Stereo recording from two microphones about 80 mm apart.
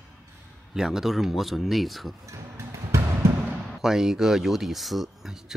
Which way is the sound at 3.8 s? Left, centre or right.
Centre.